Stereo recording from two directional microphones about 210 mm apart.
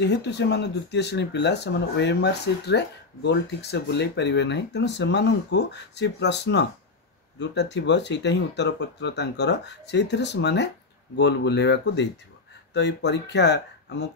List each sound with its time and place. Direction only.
0.0 s speech: 55° left (ahead or behind)